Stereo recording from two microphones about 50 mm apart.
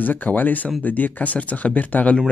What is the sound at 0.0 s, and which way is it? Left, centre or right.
Speech, left.